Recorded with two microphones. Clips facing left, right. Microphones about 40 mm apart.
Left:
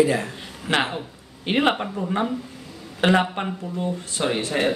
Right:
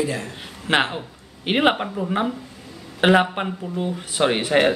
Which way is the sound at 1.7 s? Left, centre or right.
Centre.